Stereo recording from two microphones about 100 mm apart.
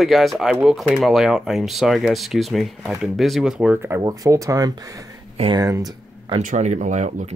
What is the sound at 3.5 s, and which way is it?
Speech, 15° right (ahead or behind).